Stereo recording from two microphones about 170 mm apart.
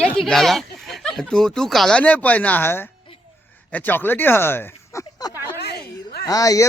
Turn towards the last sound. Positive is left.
turn(degrees=20)  # may be behind; listen again after turning